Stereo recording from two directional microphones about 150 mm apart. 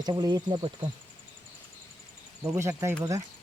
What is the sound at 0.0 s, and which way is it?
Speech, 25° right (ahead or behind).